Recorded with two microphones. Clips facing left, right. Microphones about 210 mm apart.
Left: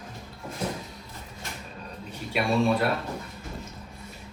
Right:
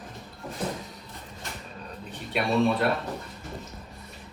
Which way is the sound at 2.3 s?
Centre (ahead or behind).